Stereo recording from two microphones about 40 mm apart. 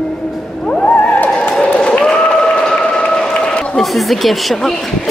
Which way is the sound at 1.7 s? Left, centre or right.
Left.